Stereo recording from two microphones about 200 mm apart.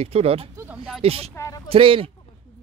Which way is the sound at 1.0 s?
30° right (ahead or behind).